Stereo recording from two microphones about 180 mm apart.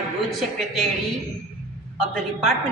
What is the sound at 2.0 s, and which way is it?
Speech, centre (ahead or behind).